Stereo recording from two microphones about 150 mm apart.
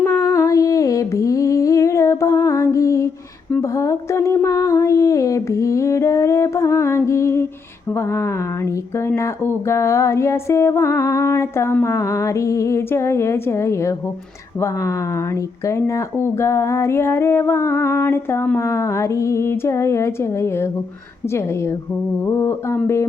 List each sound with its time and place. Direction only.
0.0 s humming: 20° left (ahead or behind)
3.6 s a sound: 20° left (ahead or behind)
15.6 s music: 20° left (ahead or behind)
22.3 s music: 15° left (ahead or behind)